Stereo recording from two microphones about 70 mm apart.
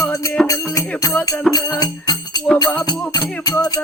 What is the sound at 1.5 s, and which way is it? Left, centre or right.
Music, left.